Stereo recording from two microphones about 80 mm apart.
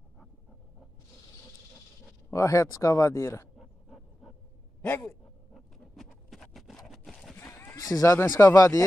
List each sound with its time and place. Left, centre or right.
2.3 s speech: left
3.5 s dog: centre
5.0 s a sound: centre
7.3 s clip-clop: left
7.9 s speech: left